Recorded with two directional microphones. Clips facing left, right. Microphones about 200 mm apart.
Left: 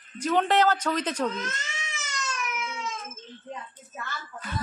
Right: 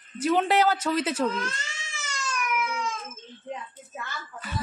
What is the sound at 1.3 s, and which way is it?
Cat, 20° left (ahead or behind).